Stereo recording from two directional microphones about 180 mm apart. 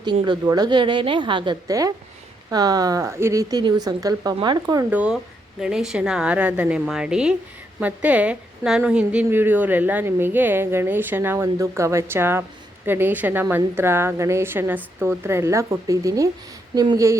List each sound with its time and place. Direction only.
0.0 s a woman's voice: 25° right (ahead or behind)
4.9 s a woman's voice: 5° right (ahead or behind)